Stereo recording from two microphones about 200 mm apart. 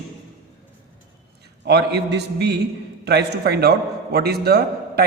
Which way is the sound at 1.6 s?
55° right (ahead or behind).